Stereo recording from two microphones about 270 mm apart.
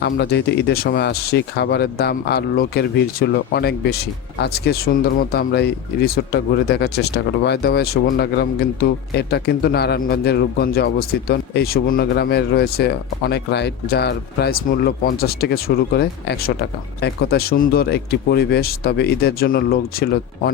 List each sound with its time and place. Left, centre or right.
0.0 s a man's voice: left